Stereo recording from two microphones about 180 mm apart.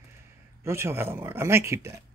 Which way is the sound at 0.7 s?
15° right (ahead or behind).